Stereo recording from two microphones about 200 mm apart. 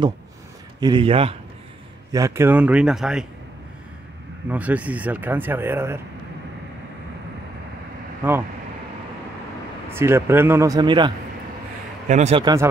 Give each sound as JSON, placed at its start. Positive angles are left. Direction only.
{"t": 0.7, "sound": "a man's voice", "side_deg": -25}
{"t": 2.1, "sound": "speech", "side_deg": -15}
{"t": 4.5, "sound": "speech", "side_deg": -5}
{"t": 8.2, "sound": "speech", "side_deg": -10}
{"t": 9.8, "sound": "speech", "side_deg": -10}
{"t": 12.1, "sound": "speech", "side_deg": -35}